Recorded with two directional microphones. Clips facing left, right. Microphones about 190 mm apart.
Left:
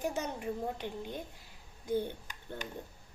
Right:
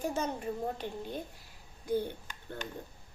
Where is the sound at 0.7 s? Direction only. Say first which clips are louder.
Right 1 dB; 15° left (ahead or behind).